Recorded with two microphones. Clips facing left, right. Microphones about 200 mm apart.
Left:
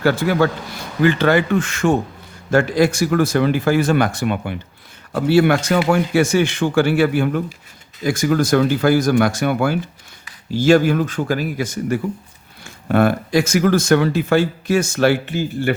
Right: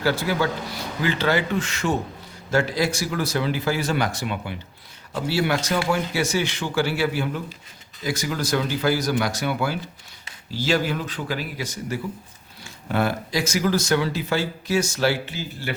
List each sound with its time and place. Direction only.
0.0 s speech: 55° left (ahead or behind)